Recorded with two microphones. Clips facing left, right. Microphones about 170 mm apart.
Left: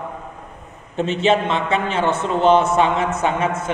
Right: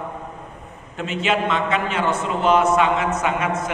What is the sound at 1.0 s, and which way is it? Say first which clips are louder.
A man's voice: left 5 dB; 30° left (ahead or behind).